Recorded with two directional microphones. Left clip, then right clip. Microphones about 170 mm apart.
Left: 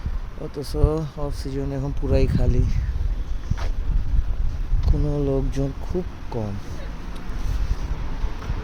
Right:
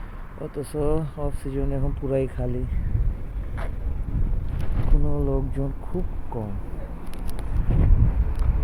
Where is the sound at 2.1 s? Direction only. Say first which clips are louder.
Left 1 dB; 35° left (ahead or behind).